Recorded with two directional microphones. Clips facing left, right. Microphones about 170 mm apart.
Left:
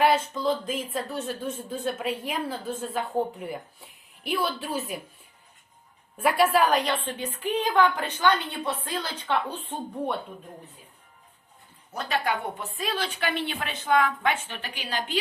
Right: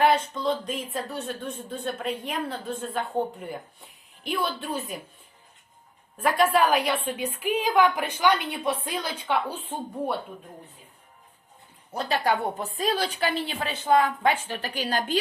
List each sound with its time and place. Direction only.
0.0 s speech: centre (ahead or behind)
6.1 s a woman's voice: 10° left (ahead or behind); by 10.2 s 10° right (ahead or behind)
11.9 s a woman's voice: 35° right (ahead or behind)